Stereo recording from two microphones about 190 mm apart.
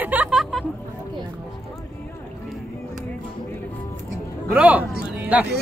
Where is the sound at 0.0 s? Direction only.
10° right (ahead or behind).